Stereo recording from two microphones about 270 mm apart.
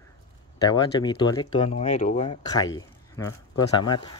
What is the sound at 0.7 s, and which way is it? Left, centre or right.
A man's voice, centre.